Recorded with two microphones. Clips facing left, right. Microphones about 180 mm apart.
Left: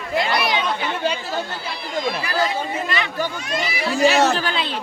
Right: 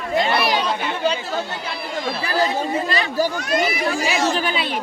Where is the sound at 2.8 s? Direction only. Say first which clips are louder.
Right 3 dB; 35° right (ahead or behind).